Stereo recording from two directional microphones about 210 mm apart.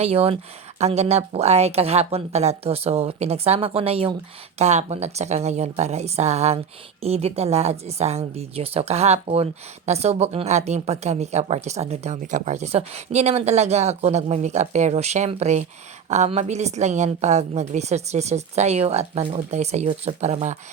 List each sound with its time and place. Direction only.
0.0 s speech: 30° right (ahead or behind)